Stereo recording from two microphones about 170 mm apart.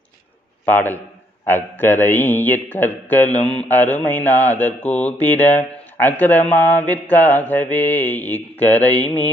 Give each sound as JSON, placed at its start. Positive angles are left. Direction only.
{"t": 0.7, "sound": "speech", "side_deg": 10}
{"t": 4.8, "sound": "speech", "side_deg": 40}
{"t": 5.2, "sound": "speech", "side_deg": 10}